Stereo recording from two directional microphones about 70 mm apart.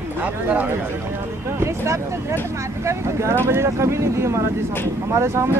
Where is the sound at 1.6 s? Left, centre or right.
Right.